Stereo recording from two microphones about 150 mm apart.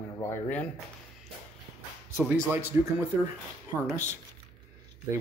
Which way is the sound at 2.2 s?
15° right (ahead or behind).